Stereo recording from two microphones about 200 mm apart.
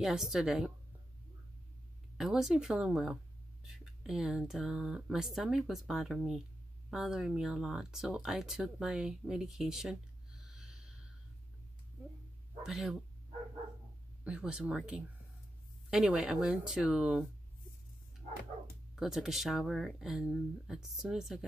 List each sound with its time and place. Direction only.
0.0 s speech: centre (ahead or behind)
2.1 s speech: centre (ahead or behind)
10.4 s snort: centre (ahead or behind)
12.6 s speech: centre (ahead or behind)
14.2 s speech: 5° right (ahead or behind)
18.9 s speech: centre (ahead or behind)